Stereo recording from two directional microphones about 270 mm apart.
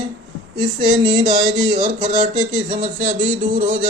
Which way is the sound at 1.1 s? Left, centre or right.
Right.